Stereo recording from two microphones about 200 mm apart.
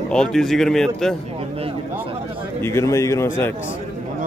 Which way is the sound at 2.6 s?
15° left (ahead or behind).